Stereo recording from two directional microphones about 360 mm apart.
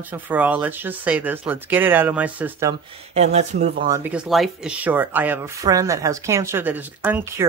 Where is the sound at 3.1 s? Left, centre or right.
Centre.